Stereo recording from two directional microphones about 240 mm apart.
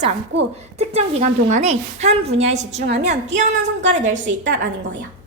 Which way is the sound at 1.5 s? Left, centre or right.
Right.